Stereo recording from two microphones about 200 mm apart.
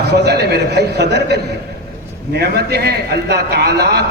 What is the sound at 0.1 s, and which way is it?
A man's voice, 55° right (ahead or behind).